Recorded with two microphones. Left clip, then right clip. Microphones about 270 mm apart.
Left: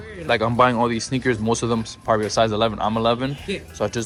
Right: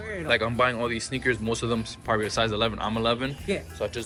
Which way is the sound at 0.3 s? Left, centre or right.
Centre.